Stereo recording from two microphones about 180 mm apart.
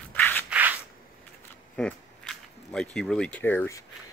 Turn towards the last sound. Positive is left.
turn(degrees=10)  # may be behind; listen again after turning